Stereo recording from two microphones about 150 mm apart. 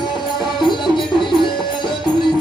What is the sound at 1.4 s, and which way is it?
Music, 30° left (ahead or behind).